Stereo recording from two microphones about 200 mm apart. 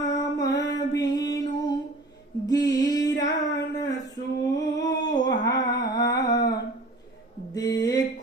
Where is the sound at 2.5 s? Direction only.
20° left (ahead or behind).